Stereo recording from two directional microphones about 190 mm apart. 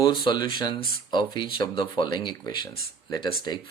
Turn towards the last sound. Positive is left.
turn(degrees=20)  # may be behind; listen again after turning